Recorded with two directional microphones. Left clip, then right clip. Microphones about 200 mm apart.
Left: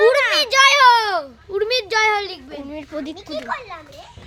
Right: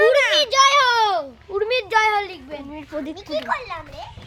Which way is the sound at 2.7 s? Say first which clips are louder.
Left 2 dB; 30° left (ahead or behind).